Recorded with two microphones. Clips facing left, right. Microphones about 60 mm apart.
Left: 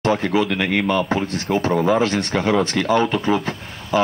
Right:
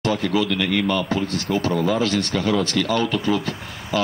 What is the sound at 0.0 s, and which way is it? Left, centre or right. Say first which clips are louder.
Speech: left 3 dB; left.